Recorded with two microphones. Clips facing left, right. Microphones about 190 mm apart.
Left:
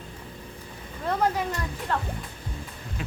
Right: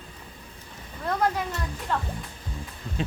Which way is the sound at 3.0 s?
25° right (ahead or behind).